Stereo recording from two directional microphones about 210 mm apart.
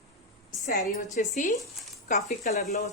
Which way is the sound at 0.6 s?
40° left (ahead or behind).